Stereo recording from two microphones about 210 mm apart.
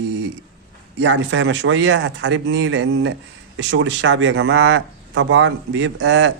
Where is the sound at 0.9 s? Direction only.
55° right (ahead or behind).